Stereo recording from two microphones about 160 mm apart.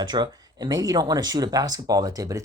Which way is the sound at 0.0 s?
25° right (ahead or behind).